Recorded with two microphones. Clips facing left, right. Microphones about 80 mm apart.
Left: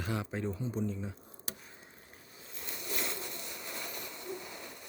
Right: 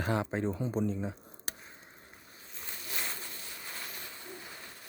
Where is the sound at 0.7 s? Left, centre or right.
Right.